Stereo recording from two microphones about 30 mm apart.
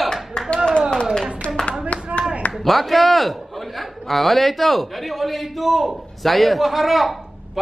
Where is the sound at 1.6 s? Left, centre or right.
Left.